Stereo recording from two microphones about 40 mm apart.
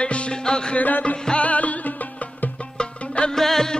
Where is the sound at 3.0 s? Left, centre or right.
Left.